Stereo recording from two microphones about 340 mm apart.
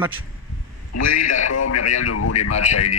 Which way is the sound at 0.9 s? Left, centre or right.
Left.